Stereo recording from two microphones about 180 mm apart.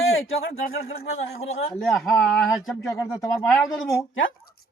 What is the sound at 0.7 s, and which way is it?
Speech, 60° left (ahead or behind).